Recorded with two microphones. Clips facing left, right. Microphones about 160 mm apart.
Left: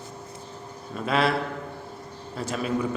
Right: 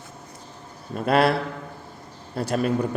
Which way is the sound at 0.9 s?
50° right (ahead or behind).